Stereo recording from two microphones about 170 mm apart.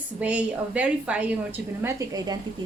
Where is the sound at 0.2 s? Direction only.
10° right (ahead or behind).